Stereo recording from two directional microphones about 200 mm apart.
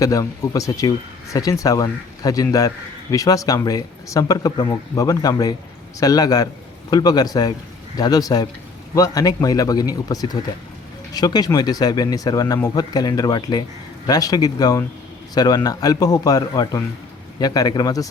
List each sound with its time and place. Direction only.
0.0 s speech: 15° left (ahead or behind)